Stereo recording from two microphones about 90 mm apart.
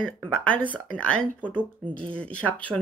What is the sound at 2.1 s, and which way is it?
Speech, 15° left (ahead or behind).